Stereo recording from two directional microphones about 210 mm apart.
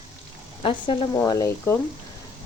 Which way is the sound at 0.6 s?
25° left (ahead or behind).